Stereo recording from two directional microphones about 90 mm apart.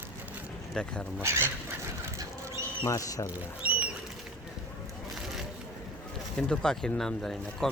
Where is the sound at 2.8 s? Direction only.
35° left (ahead or behind).